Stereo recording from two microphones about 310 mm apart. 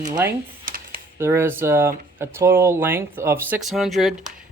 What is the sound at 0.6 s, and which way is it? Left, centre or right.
Computer keyboard, right.